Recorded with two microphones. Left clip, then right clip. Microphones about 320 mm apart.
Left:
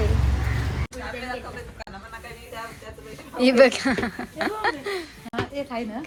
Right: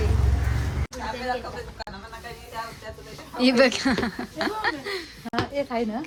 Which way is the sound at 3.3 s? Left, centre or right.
Centre.